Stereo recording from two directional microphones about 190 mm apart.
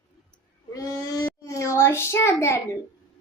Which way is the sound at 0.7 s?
15° left (ahead or behind).